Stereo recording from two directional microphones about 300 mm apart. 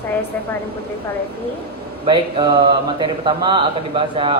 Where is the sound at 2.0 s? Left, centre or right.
Centre.